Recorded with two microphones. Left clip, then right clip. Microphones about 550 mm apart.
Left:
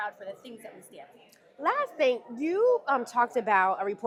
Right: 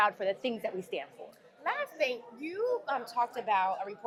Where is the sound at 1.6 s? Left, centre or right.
Left.